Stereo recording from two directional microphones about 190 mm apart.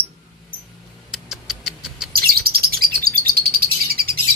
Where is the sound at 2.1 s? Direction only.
55° right (ahead or behind).